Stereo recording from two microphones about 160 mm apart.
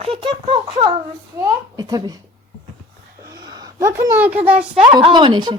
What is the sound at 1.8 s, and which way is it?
Speech, 25° right (ahead or behind).